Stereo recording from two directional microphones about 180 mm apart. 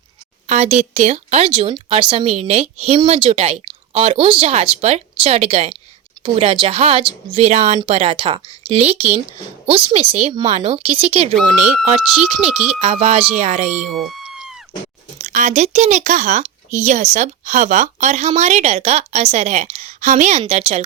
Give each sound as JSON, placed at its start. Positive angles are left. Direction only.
{"t": 0.4, "sound": "speech", "side_deg": -40}
{"t": 11.3, "sound": "speech", "side_deg": 0}
{"t": 12.8, "sound": "speech", "side_deg": -35}
{"t": 13.7, "sound": "a sound", "side_deg": 0}
{"t": 15.2, "sound": "speech", "side_deg": -45}